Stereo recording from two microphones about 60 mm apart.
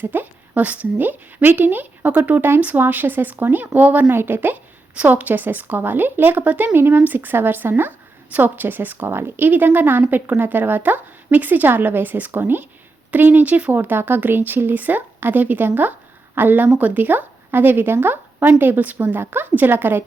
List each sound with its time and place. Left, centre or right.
0.0 s a woman's voice: right